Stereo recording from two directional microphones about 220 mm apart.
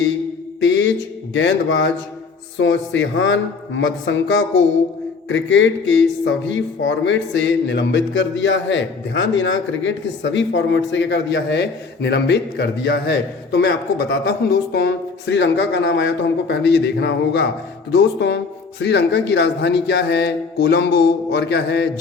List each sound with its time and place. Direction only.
0.6 s speech: 55° left (ahead or behind)